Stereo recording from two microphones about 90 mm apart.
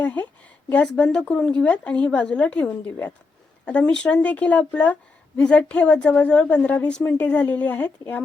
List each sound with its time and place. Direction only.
0.0 s a woman's voice: 15° left (ahead or behind)